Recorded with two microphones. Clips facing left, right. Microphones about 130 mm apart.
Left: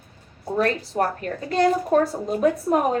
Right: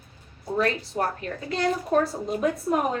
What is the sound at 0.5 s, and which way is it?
A woman's voice, 45° left (ahead or behind).